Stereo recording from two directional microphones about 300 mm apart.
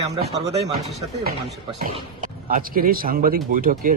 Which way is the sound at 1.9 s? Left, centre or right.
Right.